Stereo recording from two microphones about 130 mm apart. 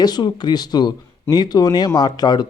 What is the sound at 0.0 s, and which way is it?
A man's voice, 30° left (ahead or behind).